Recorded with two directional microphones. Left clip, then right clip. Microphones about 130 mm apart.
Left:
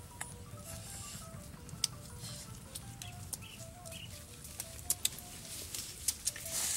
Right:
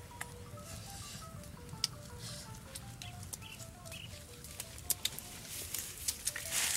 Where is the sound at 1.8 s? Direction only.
Centre (ahead or behind).